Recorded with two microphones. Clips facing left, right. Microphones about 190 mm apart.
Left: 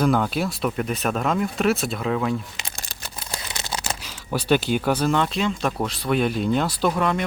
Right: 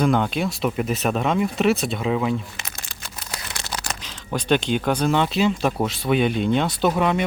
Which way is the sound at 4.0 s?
10° left (ahead or behind).